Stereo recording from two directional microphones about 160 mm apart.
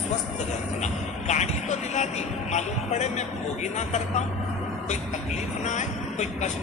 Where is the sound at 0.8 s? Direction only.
45° left (ahead or behind).